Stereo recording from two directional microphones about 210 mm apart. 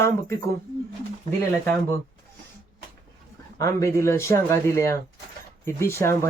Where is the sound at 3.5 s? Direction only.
15° left (ahead or behind).